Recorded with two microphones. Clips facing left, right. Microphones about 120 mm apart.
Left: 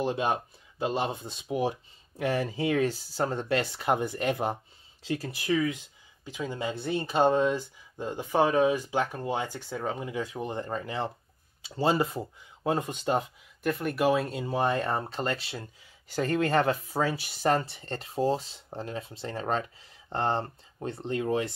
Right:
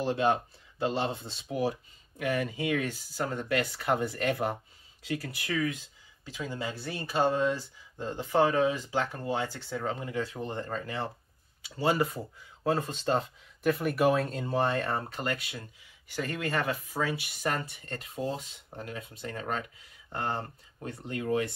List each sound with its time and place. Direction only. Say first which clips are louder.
0.0 s speech: right 1 dB; 15° left (ahead or behind)
13.6 s speech: right 1 dB; centre (ahead or behind); by 21.5 s 25° left (ahead or behind)